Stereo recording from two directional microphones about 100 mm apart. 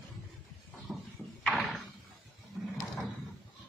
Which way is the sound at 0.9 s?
10° right (ahead or behind).